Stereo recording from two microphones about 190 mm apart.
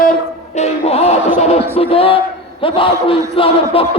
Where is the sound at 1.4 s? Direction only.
35° left (ahead or behind).